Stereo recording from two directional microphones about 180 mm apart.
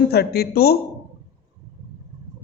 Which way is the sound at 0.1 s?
60° left (ahead or behind).